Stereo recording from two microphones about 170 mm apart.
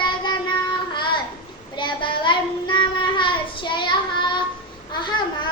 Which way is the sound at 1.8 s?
30° left (ahead or behind).